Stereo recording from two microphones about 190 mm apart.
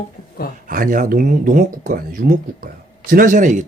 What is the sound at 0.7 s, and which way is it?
Speech, 45° right (ahead or behind).